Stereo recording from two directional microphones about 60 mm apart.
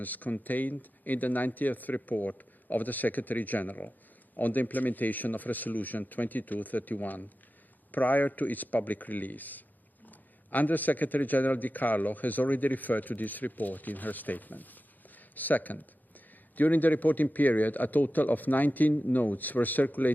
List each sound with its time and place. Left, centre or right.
0.0 s a man's voice: left